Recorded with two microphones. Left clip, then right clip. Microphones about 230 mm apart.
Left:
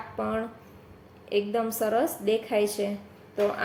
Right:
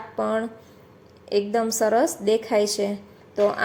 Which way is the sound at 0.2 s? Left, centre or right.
Right.